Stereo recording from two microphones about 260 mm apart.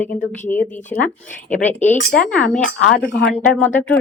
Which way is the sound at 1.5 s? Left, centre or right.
Left.